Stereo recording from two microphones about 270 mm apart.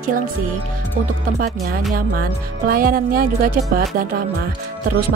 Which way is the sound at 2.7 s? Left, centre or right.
Right.